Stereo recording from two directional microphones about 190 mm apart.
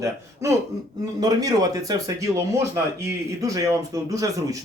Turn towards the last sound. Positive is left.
turn(degrees=-20)  # may be behind; listen again after turning